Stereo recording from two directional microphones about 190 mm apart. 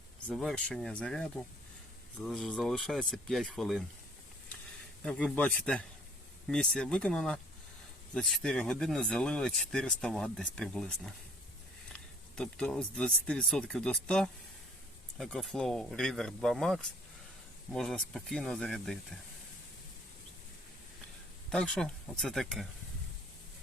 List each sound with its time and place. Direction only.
0.3 s speech: 5° left (ahead or behind)
5.0 s speech: 5° left (ahead or behind)
12.4 s speech: 5° left (ahead or behind)
21.5 s speech: 5° left (ahead or behind)